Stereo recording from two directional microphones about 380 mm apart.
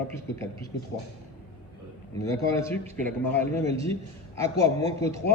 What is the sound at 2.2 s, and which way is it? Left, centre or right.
Speech, centre.